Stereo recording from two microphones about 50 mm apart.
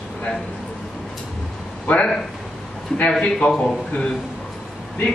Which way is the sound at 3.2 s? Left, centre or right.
Centre.